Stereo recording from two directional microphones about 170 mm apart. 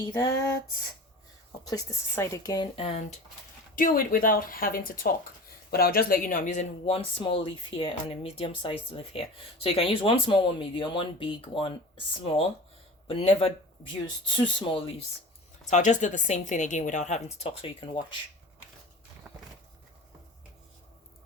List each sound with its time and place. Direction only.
1.6 s speech: 20° left (ahead or behind); by 3.1 s 35° left (ahead or behind)
3.8 s a woman's voice: 55° left (ahead or behind)
6.8 s speech: 30° left (ahead or behind)
15.6 s a woman's voice: 45° left (ahead or behind); by 18.2 s 30° left (ahead or behind)